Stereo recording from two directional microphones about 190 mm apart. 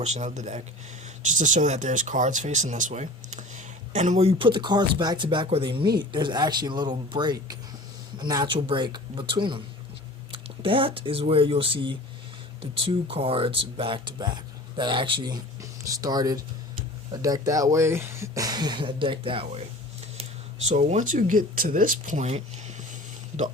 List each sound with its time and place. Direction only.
0.0 s speech: 40° right (ahead or behind)
20.7 s speech: 40° right (ahead or behind)